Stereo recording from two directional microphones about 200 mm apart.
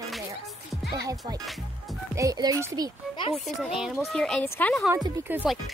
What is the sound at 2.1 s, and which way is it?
Speech, 20° right (ahead or behind).